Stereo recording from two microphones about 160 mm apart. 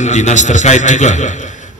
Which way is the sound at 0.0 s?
45° left (ahead or behind).